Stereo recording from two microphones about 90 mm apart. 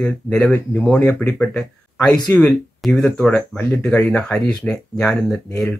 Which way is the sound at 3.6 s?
20° left (ahead or behind).